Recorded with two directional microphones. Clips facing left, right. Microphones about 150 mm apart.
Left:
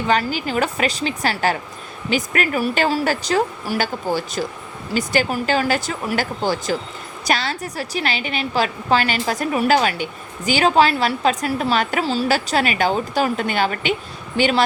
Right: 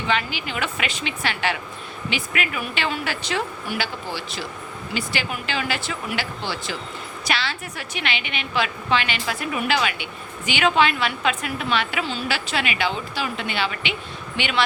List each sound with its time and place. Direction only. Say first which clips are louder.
0.1 s a woman's voice: left 6 dB; 40° left (ahead or behind)